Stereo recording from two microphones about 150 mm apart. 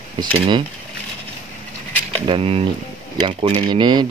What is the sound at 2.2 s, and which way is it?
Speech, 40° right (ahead or behind).